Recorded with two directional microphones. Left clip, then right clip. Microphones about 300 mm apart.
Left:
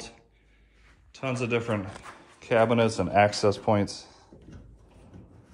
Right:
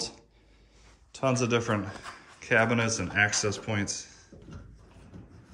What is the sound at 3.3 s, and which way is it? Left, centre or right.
Speech, left.